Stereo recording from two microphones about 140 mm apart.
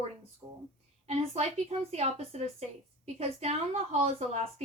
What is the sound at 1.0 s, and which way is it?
A woman's voice, 50° right (ahead or behind).